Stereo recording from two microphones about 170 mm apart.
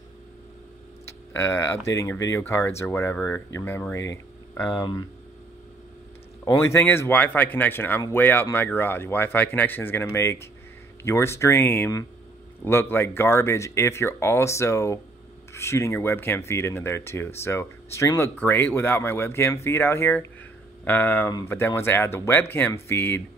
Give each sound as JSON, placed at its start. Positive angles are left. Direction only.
{"t": 1.3, "sound": "speech", "side_deg": 15}
{"t": 6.4, "sound": "speech", "side_deg": 15}